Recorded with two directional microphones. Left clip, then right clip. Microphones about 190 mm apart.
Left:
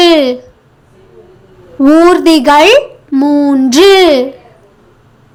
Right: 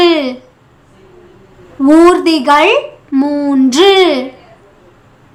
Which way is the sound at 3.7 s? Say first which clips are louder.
Left 3 dB; 15° left (ahead or behind).